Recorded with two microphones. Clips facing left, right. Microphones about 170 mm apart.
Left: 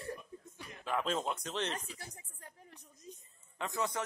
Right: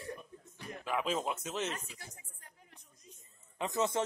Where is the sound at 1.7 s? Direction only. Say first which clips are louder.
Left 2 dB; 40° left (ahead or behind).